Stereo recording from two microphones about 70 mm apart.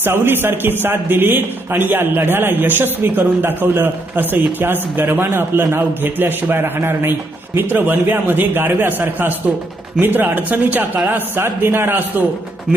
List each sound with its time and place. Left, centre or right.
0.0 s a man's voice: right